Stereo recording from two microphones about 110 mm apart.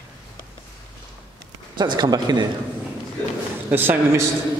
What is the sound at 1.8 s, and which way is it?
Speech, 40° right (ahead or behind).